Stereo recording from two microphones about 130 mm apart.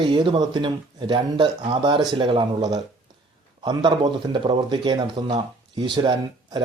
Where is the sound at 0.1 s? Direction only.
40° right (ahead or behind).